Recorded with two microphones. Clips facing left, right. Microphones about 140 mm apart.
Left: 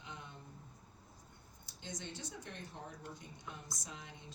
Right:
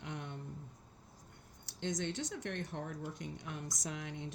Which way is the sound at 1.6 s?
75° right (ahead or behind).